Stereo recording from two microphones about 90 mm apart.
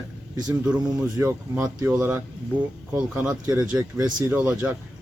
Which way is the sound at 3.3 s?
35° right (ahead or behind).